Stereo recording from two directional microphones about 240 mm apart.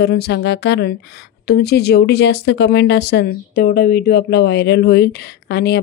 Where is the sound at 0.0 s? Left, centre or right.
Left.